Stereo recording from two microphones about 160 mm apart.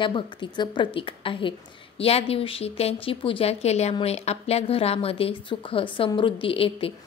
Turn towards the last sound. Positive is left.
turn(degrees=35)  # may be behind; listen again after turning